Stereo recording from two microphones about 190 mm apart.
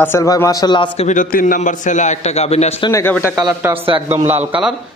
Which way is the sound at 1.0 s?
40° left (ahead or behind).